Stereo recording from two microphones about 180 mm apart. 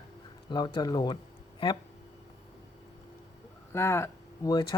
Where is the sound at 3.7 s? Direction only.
15° left (ahead or behind).